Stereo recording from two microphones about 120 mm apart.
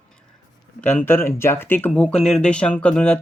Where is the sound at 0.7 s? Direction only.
10° left (ahead or behind).